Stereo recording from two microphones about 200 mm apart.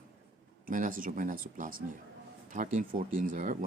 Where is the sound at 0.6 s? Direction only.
40° right (ahead or behind).